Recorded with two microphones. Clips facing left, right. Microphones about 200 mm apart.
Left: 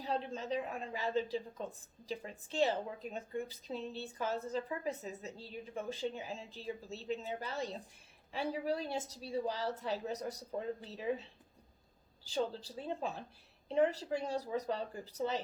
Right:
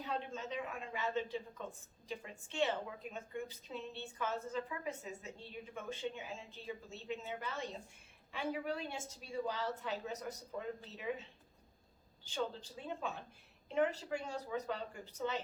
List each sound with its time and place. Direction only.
0.0 s a woman's voice: 35° left (ahead or behind)